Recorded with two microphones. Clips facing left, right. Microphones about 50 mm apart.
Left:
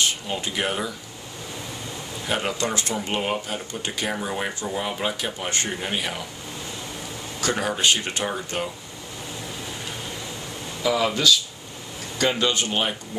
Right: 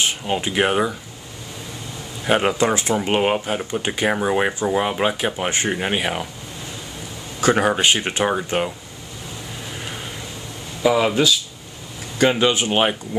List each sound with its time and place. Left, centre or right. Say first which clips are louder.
0.3 s speech: right 7 dB; right
2.2 s speech: right 8 dB; right
2.5 s speech: right 7 dB; right
3.0 s speech: right 7 dB; right
5.5 s speech: right 5 dB; right
5.8 s speech: right 6 dB; right
7.3 s speech: right 8 dB; right
10.8 s speech: right 5 dB; right